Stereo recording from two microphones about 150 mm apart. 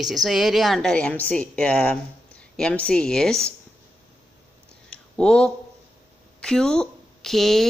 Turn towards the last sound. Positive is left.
turn(degrees=0)  # may be behind; listen again after turning